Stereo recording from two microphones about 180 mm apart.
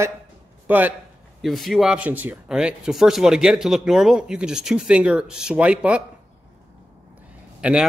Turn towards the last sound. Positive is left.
turn(degrees=-5)  # may be behind; listen again after turning